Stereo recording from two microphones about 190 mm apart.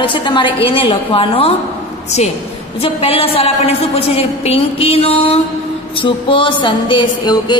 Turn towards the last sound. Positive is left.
turn(degrees=25)  # may be behind; listen again after turning